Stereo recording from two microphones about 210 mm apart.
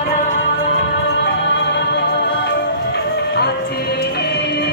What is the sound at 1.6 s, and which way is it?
Music, 55° left (ahead or behind).